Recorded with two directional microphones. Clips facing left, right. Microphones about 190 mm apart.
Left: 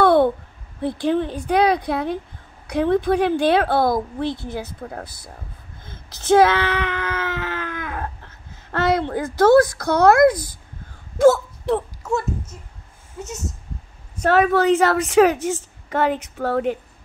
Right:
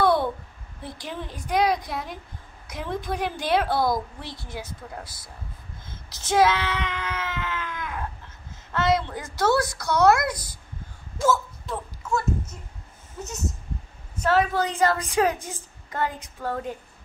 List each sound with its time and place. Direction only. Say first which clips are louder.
0.0 s a sound: left 7 dB; 60° left (ahead or behind)
0.8 s a woman's voice: left 14 dB; 65° left (ahead or behind)
11.1 s hiccup: left 10 dB; 70° left (ahead or behind)
14.2 s a woman's voice: left 6 dB; 60° left (ahead or behind)